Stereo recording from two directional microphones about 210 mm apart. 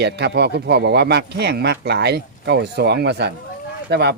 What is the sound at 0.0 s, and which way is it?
Speech, 50° right (ahead or behind).